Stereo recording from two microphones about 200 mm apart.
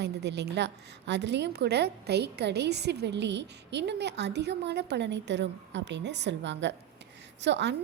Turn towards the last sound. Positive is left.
turn(degrees=-60)  # may be behind; listen again after turning